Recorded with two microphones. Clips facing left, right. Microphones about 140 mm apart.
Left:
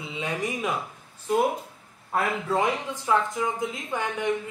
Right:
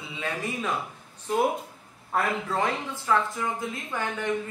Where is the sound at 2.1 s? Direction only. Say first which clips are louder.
Left 2 dB; 10° left (ahead or behind).